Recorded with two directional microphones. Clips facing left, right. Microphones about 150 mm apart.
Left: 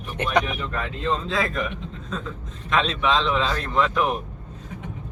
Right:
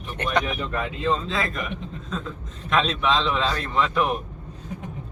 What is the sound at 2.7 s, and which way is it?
Speech, centre (ahead or behind).